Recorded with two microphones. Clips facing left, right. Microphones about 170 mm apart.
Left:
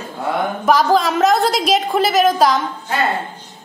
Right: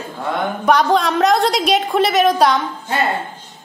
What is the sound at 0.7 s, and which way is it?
A woman's voice, centre (ahead or behind).